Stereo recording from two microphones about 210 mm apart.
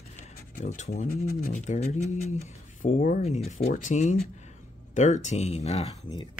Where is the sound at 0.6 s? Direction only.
35° left (ahead or behind).